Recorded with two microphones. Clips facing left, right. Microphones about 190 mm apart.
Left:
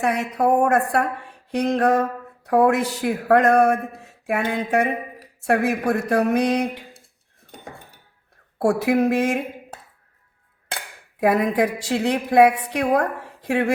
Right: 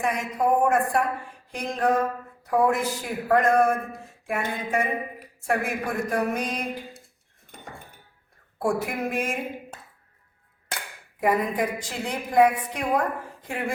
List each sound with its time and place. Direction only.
0.0 s speech: 70° left (ahead or behind)
8.5 s speech: 70° left (ahead or behind)
11.2 s speech: 80° left